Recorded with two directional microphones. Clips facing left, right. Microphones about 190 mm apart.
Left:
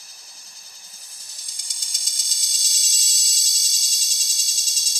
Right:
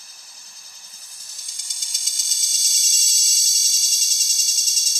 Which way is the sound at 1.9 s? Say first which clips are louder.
Even; centre (ahead or behind).